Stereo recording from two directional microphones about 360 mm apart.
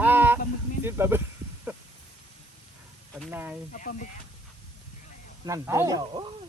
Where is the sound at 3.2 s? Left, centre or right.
Centre.